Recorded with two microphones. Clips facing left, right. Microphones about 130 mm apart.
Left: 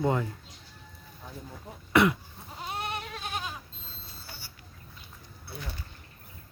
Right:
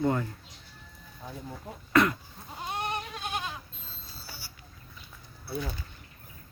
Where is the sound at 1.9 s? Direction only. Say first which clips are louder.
Left 1 dB; 15° left (ahead or behind).